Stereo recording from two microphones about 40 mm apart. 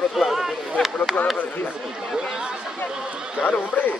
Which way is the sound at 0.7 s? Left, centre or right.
Centre.